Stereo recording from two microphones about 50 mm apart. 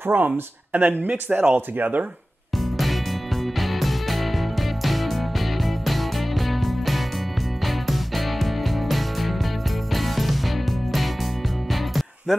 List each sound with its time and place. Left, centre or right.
0.0 s speech: right
3.5 s music: centre
11.7 s music: centre